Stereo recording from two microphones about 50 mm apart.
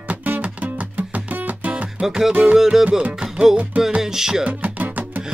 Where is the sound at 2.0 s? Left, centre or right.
Centre.